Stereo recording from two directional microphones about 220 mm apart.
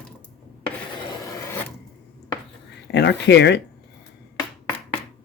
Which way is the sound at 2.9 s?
50° left (ahead or behind).